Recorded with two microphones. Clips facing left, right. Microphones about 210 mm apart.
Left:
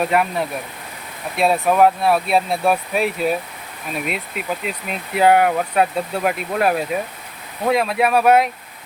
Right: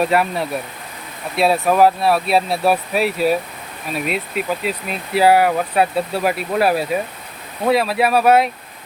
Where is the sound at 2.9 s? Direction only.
35° right (ahead or behind).